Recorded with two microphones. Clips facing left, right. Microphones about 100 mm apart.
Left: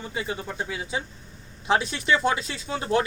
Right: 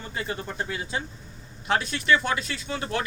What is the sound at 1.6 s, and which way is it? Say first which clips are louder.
Speech: left 1 dB; 20° left (ahead or behind).